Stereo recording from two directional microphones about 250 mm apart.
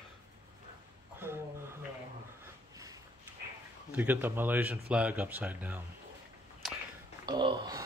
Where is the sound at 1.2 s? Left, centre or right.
Centre.